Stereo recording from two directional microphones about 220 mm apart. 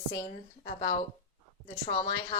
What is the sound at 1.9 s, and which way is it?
Speech, 25° left (ahead or behind).